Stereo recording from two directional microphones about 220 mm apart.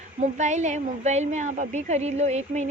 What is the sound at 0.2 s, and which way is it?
A woman's voice, 30° right (ahead or behind).